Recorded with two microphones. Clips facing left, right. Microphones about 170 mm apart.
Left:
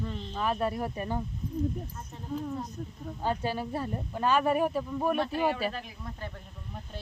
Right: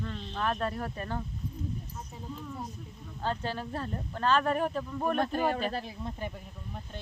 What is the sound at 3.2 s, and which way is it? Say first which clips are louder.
Speech: left 3 dB; 10° left (ahead or behind).